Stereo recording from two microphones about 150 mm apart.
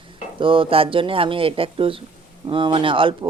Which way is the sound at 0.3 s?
35° right (ahead or behind).